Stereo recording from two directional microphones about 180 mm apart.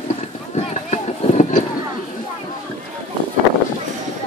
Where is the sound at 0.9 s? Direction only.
40° left (ahead or behind).